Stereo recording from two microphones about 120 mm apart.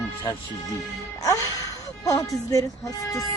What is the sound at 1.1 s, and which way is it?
A man's voice, 30° left (ahead or behind).